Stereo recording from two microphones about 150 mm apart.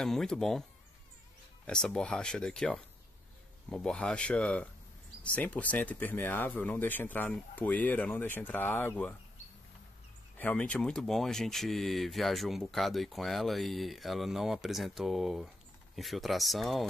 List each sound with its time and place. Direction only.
0.0 s speech: centre (ahead or behind)
1.7 s speech: 5° left (ahead or behind)
10.3 s speech: 10° left (ahead or behind)